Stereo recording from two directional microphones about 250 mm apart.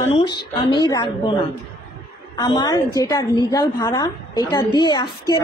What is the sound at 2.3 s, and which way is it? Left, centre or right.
Speech, centre.